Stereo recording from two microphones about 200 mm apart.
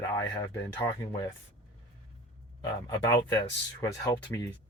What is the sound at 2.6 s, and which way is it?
Speech, 15° left (ahead or behind).